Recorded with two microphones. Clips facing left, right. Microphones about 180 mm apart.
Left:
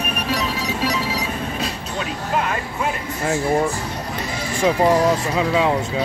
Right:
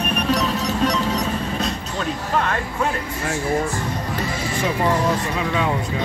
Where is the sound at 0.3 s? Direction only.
Centre (ahead or behind).